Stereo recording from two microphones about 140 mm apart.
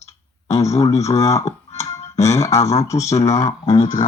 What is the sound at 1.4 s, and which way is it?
Music, 50° left (ahead or behind).